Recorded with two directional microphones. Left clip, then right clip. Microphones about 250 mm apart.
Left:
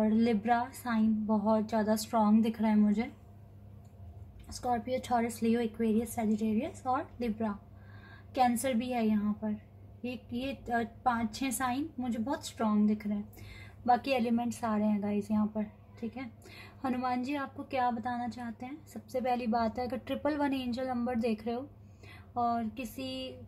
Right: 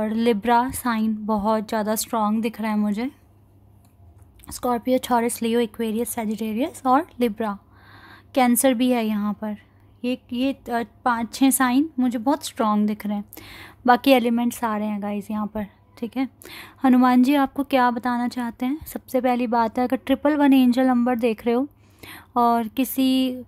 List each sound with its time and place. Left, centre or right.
0.0 s a woman's voice: right
4.6 s a woman's voice: right
8.6 s a woman's voice: right
16.8 s a woman's voice: right